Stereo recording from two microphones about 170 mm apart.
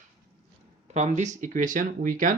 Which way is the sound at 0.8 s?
40° right (ahead or behind).